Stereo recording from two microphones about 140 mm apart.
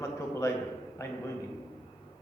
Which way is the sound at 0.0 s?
20° left (ahead or behind).